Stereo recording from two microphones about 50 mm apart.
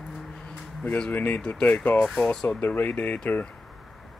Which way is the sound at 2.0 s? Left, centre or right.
Centre.